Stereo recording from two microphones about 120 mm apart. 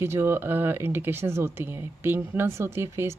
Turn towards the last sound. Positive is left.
turn(degrees=-20)  # may be behind; listen again after turning